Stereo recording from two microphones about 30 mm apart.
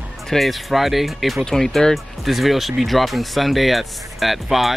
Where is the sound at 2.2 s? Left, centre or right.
Centre.